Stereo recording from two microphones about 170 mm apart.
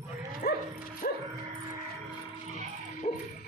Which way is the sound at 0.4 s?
65° left (ahead or behind).